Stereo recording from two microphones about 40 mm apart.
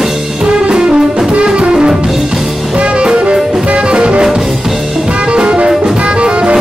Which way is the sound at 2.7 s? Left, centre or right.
Right.